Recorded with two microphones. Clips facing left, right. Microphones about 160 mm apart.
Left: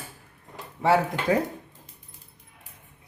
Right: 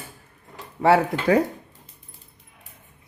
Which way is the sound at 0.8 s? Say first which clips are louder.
Right 4 dB; 65° right (ahead or behind).